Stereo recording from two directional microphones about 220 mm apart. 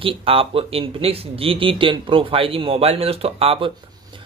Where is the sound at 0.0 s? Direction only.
25° right (ahead or behind).